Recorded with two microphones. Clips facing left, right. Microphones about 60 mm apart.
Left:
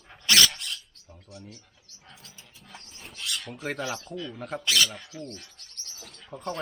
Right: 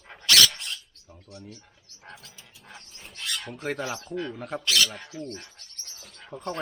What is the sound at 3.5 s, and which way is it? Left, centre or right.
Speech, centre.